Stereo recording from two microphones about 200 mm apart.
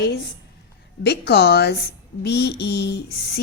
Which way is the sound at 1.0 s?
55° left (ahead or behind).